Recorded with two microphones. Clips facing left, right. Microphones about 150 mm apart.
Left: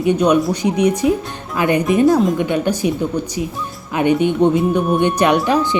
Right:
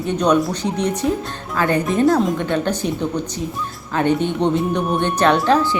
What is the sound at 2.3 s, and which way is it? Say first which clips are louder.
Speech: left 3 dB; 10° left (ahead or behind).